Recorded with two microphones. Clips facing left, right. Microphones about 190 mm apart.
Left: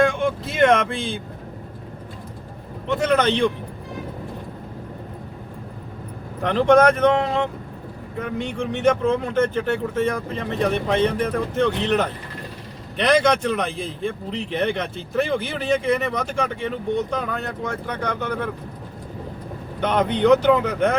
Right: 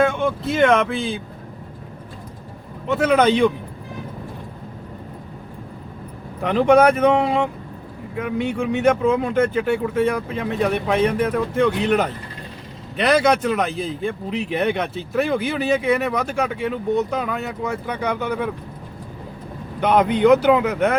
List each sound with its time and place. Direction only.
0.0 s speech: centre (ahead or behind)
2.9 s a man's voice: 5° right (ahead or behind)
6.4 s a man's voice: 5° right (ahead or behind)
19.8 s a man's voice: 5° right (ahead or behind)